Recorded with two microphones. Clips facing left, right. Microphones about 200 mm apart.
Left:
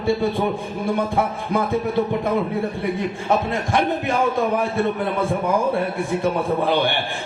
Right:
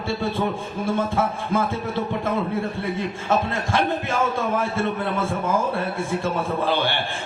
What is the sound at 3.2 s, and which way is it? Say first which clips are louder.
Speech: left 1 dB; 15° left (ahead or behind).